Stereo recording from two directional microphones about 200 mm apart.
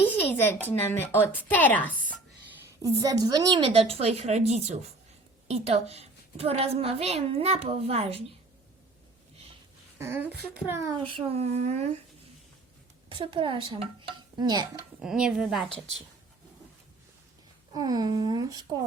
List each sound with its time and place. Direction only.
0.0 s a sound: 10° left (ahead or behind)
0.7 s a woman's voice: 10° left (ahead or behind)
2.8 s a woman's voice: 20° right (ahead or behind)
10.0 s speech: 10° right (ahead or behind)
11.1 s a woman's voice: 30° right (ahead or behind)
13.1 s a woman's voice: 25° right (ahead or behind)
15.0 s a woman's voice: 5° right (ahead or behind)
17.7 s a woman's voice: 20° right (ahead or behind)